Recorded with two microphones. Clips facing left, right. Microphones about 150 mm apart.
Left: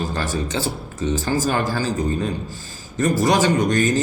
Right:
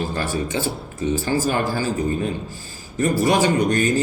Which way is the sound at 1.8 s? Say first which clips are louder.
Even; 20° left (ahead or behind).